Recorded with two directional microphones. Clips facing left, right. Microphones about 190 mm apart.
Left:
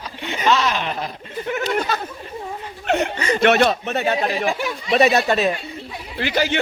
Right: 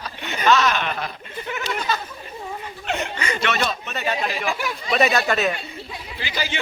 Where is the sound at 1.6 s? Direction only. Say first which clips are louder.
Left 2 dB; 55° left (ahead or behind).